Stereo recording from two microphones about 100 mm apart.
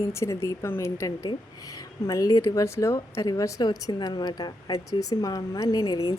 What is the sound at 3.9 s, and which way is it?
A woman's voice, 45° left (ahead or behind).